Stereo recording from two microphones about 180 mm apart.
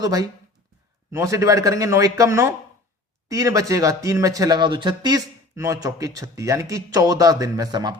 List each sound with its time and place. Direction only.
0.0 s speech: 20° right (ahead or behind)